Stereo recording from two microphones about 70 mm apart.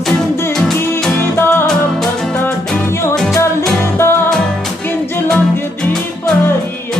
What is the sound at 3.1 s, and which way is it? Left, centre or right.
Music, centre.